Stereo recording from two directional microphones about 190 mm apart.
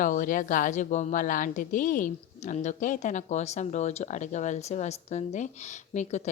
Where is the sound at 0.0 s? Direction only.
45° left (ahead or behind).